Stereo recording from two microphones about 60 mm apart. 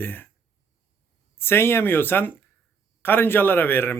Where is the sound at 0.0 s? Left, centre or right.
Left.